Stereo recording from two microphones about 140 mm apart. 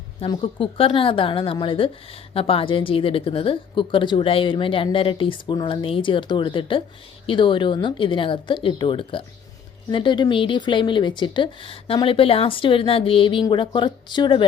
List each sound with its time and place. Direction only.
0.3 s speech: 40° left (ahead or behind)